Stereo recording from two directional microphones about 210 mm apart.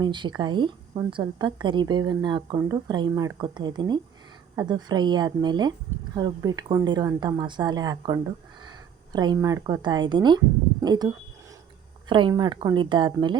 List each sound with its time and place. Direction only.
0.0 s a woman's voice: 20° right (ahead or behind)